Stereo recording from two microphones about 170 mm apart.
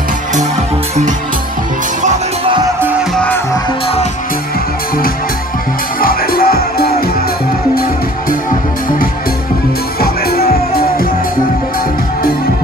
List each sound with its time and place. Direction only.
5.9 s music: 60° left (ahead or behind)
9.9 s music: 65° left (ahead or behind)